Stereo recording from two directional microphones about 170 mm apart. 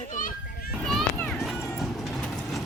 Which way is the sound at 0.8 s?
5° left (ahead or behind).